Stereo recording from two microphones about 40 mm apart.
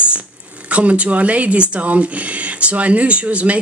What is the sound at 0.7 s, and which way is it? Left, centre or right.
A woman's voice, right.